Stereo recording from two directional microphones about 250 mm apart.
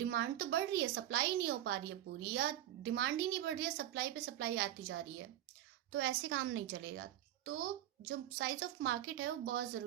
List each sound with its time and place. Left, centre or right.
0.0 s a woman's voice: right